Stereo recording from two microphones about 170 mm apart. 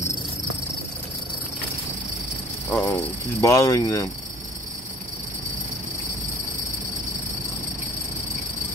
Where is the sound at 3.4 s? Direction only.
15° left (ahead or behind).